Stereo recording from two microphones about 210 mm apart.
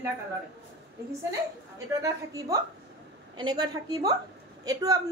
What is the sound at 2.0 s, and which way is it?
A woman's voice, 15° right (ahead or behind).